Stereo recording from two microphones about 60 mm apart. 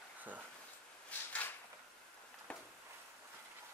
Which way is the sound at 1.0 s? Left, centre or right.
Left.